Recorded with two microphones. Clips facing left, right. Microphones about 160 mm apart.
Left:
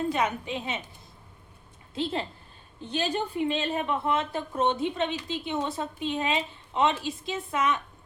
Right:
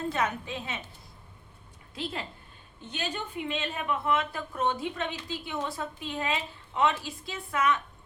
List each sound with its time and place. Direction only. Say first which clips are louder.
0.1 s a woman's voice: left 3 dB; 20° left (ahead or behind)
2.8 s a woman's voice: left 6 dB; 35° left (ahead or behind)